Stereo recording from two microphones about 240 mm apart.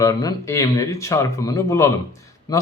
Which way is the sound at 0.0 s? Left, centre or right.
Centre.